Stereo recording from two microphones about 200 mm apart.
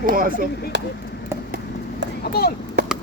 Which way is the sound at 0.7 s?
60° right (ahead or behind).